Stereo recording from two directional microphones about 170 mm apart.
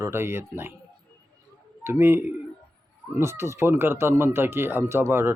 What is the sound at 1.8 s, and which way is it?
Speech, 15° right (ahead or behind).